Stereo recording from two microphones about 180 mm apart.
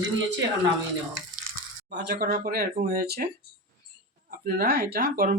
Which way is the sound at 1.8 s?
65° right (ahead or behind).